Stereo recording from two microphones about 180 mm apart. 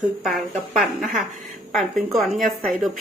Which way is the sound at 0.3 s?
Centre (ahead or behind).